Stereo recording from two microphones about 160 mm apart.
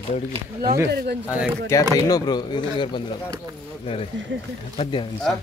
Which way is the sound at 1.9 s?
25° left (ahead or behind).